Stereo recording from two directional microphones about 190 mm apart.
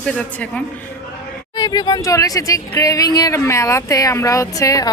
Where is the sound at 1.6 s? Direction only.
20° left (ahead or behind).